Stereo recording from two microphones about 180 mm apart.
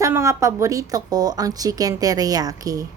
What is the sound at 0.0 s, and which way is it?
A woman's voice, 15° right (ahead or behind).